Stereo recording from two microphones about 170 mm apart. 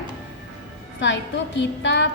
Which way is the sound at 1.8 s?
90° left.